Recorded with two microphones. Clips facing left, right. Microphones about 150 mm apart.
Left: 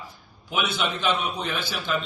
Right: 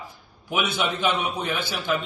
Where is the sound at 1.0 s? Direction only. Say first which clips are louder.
Right 1 dB; 50° right (ahead or behind).